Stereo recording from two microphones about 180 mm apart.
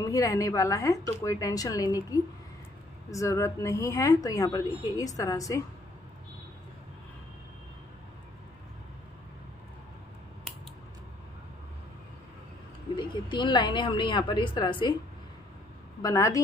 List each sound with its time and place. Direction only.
0.0 s a woman's voice: 20° left (ahead or behind)
12.9 s a woman's voice: 25° left (ahead or behind)
16.0 s a woman's voice: 20° left (ahead or behind)